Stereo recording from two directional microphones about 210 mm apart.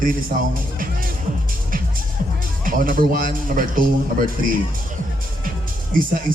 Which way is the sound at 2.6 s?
40° right (ahead or behind).